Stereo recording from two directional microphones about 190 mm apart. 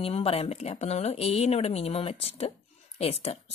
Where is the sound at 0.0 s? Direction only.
30° left (ahead or behind).